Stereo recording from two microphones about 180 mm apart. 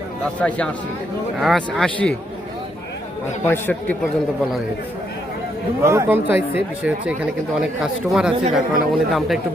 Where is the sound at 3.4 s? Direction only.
10° left (ahead or behind).